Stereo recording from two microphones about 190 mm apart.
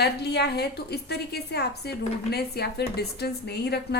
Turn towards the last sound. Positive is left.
turn(degrees=60)  # may be behind; listen again after turning